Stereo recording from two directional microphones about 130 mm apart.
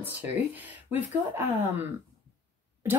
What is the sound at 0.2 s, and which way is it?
A woman's voice, 15° right (ahead or behind).